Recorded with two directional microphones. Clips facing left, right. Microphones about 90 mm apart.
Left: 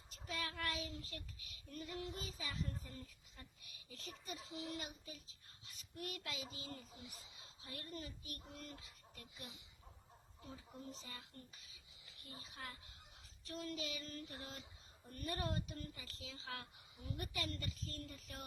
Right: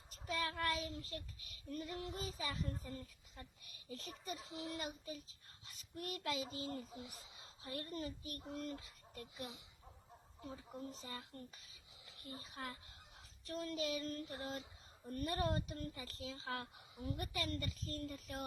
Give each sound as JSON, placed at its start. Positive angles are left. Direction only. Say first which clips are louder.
{"t": 0.1, "sound": "a child's voice", "louder": "right 5 dB", "side_deg": -40}